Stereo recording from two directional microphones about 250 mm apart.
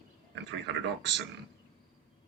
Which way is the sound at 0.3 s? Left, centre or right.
Right.